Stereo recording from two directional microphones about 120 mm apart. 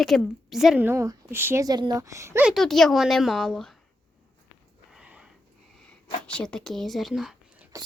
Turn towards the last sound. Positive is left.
turn(degrees=-5)  # may be behind; listen again after turning